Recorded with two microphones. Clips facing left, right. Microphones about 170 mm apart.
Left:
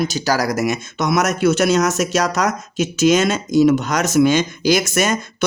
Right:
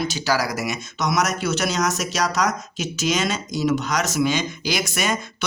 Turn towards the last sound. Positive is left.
turn(degrees=45)  # may be behind; listen again after turning